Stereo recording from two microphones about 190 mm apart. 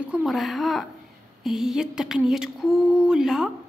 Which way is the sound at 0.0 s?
5° right (ahead or behind).